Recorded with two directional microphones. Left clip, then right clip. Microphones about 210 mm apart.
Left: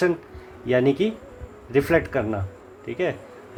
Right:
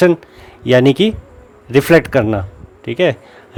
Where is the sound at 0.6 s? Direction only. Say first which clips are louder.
Right 9 dB; 55° right (ahead or behind).